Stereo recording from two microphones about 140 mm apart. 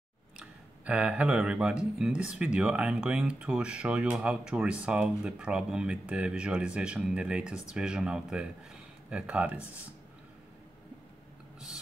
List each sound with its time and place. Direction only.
0.4 s speech: 10° right (ahead or behind)